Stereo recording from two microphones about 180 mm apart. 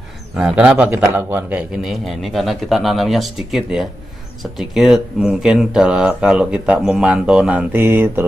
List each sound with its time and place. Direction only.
0.4 s speech: 5° right (ahead or behind)